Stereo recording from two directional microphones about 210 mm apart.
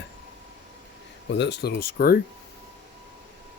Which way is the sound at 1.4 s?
50° left (ahead or behind).